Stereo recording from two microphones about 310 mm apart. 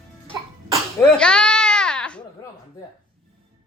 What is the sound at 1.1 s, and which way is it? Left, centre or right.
Baby cry, centre.